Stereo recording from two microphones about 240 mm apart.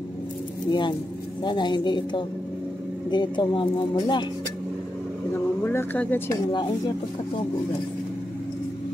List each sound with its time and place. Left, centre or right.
0.7 s a woman's voice: centre
5.6 s a woman's voice: centre